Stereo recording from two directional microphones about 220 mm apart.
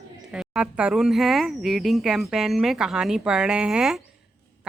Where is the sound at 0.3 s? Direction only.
5° right (ahead or behind).